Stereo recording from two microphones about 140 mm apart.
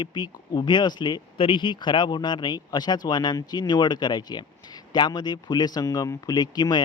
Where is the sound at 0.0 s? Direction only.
30° left (ahead or behind).